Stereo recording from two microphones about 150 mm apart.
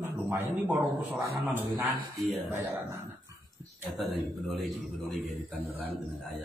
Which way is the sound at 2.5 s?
15° right (ahead or behind).